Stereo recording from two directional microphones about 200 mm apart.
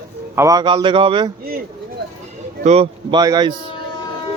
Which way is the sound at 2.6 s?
30° right (ahead or behind).